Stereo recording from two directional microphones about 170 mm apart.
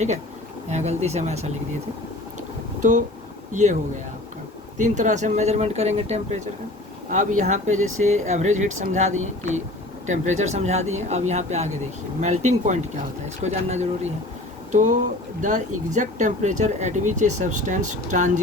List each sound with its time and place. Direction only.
0.7 s speech: 40° right (ahead or behind)
3.5 s speech: 45° right (ahead or behind)
4.8 s speech: 45° right (ahead or behind)